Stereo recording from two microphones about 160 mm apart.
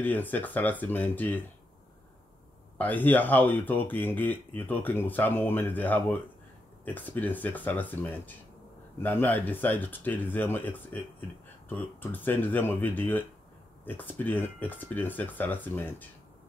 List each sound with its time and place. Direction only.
0.0 s speech: 10° left (ahead or behind)
2.8 s speech: 10° left (ahead or behind)